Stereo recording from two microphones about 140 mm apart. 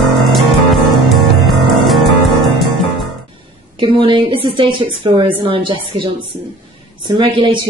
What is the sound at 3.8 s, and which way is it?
A woman's voice, 35° right (ahead or behind).